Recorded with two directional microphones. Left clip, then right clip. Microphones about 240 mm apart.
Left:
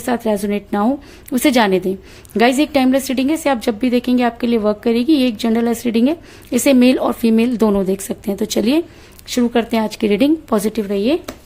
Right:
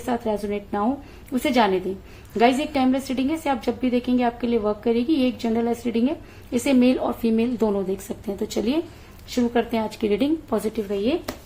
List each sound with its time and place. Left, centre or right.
0.0 s a woman's voice: left